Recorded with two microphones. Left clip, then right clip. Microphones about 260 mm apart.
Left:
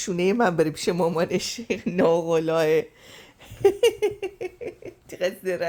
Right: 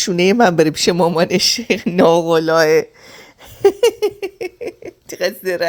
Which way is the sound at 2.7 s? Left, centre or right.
Centre.